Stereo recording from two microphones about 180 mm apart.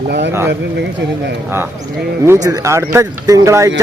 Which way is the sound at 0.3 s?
15° right (ahead or behind).